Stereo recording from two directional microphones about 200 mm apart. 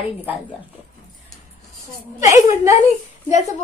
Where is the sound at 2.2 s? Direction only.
15° right (ahead or behind).